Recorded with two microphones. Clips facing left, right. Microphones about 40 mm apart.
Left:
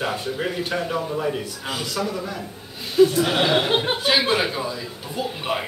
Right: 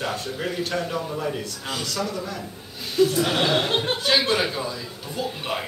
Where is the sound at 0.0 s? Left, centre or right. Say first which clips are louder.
Left 3 dB; centre.